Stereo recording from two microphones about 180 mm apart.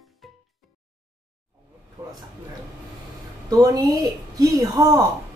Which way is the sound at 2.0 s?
15° right (ahead or behind).